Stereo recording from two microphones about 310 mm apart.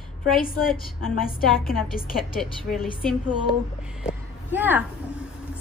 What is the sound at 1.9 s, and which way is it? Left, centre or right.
Speech, centre.